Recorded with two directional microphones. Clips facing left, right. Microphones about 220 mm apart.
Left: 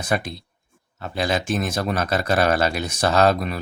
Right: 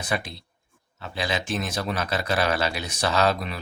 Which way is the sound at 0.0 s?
45° left (ahead or behind).